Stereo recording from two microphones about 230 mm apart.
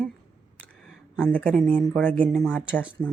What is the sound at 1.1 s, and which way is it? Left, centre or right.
Speech, centre.